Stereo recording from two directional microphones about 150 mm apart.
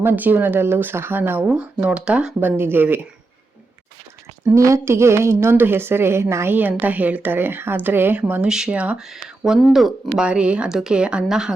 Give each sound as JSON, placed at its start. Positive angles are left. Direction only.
{"t": 0.0, "sound": "speech", "side_deg": -15}
{"t": 4.4, "sound": "speech", "side_deg": -20}